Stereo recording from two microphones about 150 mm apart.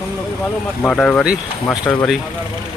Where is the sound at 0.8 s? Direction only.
5° left (ahead or behind).